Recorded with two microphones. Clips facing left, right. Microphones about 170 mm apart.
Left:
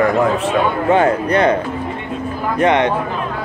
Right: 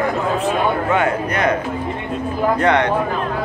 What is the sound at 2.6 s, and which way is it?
Speech, 20° left (ahead or behind).